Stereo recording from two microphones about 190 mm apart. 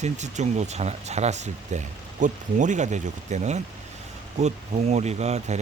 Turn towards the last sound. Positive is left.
turn(degrees=-35)  # may be behind; listen again after turning